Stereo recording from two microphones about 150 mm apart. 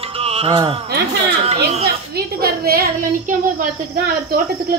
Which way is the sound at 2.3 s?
90° right.